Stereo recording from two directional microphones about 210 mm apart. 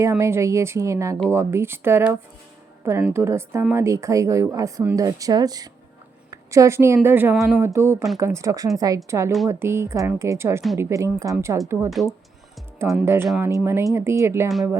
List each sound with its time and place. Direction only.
0.0 s a woman's voice: 15° right (ahead or behind)
12.0 s a woman's voice: centre (ahead or behind)
13.5 s a woman's voice: 15° right (ahead or behind)